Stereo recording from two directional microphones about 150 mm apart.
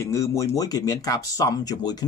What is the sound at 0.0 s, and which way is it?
Speech, 20° left (ahead or behind).